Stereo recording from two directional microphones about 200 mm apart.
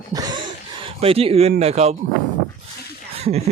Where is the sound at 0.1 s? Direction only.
20° right (ahead or behind).